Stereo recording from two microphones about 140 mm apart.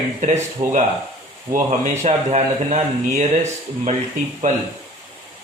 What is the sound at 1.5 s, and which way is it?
Speech, 55° right (ahead or behind).